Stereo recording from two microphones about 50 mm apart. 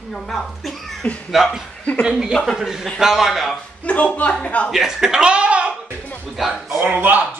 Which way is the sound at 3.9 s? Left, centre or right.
Left.